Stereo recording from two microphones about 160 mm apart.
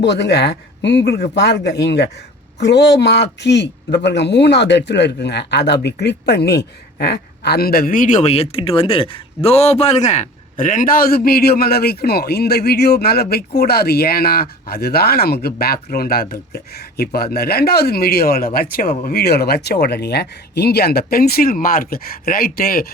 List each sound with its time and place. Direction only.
0.0 s a man's voice: 90° left; by 18.9 s 70° left (ahead or behind)
19.0 s speech: 80° left
21.1 s speech: 70° left (ahead or behind)